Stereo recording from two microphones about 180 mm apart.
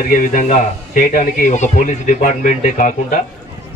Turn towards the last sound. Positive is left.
turn(degrees=45)  # may be behind; listen again after turning